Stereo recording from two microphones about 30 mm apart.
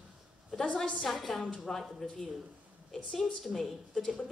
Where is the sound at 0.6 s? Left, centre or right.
Left.